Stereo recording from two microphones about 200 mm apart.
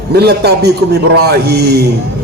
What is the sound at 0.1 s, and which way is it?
A man's voice, 55° right (ahead or behind).